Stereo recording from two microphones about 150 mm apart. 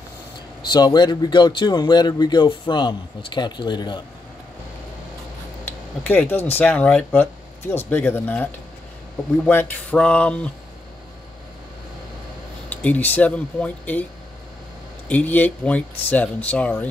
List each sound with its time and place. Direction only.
0.6 s speech: 30° left (ahead or behind)
5.7 s speech: 10° left (ahead or behind)
12.6 s speech: 10° left (ahead or behind)
15.0 s speech: 10° left (ahead or behind)